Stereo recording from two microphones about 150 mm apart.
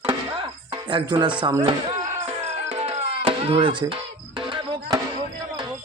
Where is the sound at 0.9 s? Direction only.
30° right (ahead or behind).